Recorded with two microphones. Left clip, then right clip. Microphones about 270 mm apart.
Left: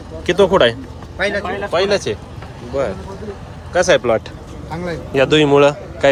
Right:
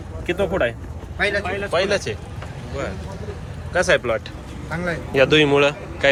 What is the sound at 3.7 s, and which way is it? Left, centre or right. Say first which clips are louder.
A man's voice: left 5 dB; centre.